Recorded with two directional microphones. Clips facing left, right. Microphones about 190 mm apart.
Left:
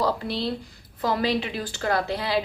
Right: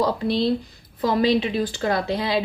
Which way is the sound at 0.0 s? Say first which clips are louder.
Right 5 dB; 20° right (ahead or behind).